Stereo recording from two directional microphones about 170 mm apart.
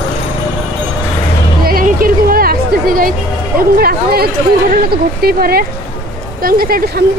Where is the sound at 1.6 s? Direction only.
55° right (ahead or behind).